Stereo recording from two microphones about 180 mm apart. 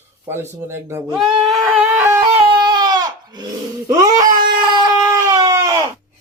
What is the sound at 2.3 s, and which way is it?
Baby cry, 25° right (ahead or behind).